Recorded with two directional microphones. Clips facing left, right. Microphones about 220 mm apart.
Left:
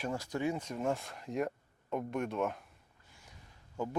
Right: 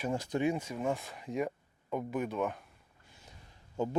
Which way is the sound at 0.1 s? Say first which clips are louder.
Right 5 dB; 20° right (ahead or behind).